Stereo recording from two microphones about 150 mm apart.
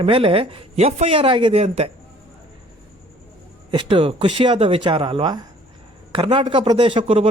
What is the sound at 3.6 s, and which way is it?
A man's voice, 35° right (ahead or behind).